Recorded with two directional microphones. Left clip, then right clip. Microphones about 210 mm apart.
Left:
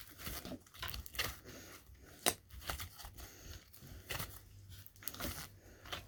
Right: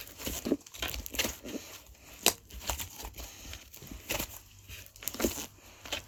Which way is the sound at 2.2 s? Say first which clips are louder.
Right 8 dB; 15° right (ahead or behind).